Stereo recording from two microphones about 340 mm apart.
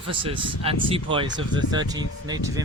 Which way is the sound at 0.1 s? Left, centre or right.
Centre.